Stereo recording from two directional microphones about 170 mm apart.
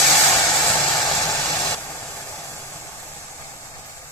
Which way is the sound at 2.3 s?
15° left (ahead or behind).